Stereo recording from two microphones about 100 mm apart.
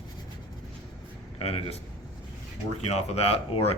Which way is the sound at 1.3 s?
80° left.